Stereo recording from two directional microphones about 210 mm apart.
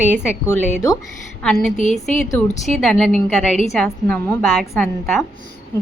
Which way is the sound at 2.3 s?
5° left (ahead or behind).